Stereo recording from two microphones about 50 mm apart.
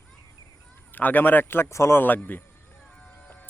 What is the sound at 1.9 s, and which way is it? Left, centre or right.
Speech, left.